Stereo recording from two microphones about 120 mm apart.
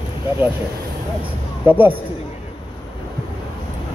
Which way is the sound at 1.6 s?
15° right (ahead or behind).